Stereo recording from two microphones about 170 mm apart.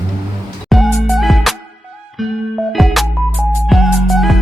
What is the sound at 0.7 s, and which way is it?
Music, centre (ahead or behind).